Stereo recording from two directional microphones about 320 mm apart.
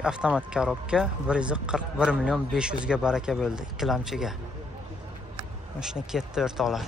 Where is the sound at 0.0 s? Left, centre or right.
Centre.